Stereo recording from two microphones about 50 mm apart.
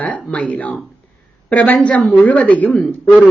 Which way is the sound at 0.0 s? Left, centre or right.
Left.